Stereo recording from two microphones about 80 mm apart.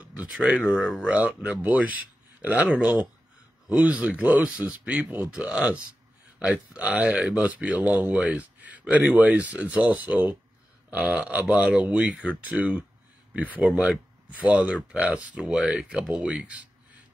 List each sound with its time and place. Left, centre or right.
0.0 s a sound: centre
0.7 s speech: centre
1.1 s speech: centre